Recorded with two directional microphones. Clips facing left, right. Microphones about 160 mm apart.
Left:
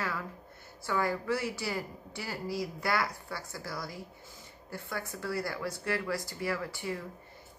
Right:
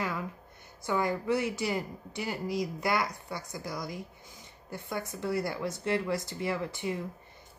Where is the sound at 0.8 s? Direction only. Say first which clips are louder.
Right 2 dB; 20° right (ahead or behind).